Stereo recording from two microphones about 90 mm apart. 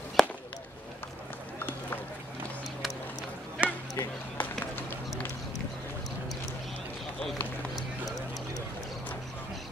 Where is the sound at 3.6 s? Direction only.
15° right (ahead or behind).